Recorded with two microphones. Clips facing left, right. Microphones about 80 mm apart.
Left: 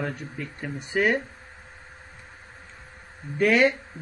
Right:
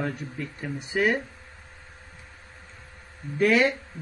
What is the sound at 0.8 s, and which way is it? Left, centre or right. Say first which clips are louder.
Speech: left 1 dB; centre.